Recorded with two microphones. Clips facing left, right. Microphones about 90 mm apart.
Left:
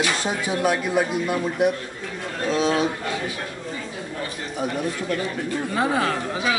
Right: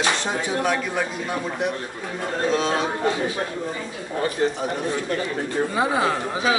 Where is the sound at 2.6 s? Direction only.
35° right (ahead or behind).